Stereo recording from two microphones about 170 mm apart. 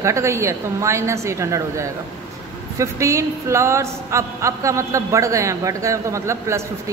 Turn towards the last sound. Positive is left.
turn(degrees=-15)  # may be behind; listen again after turning